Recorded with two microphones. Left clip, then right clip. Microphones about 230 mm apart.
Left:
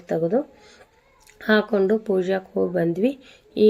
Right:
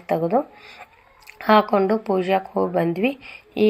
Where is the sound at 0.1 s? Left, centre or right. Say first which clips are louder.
Right 1 dB; right.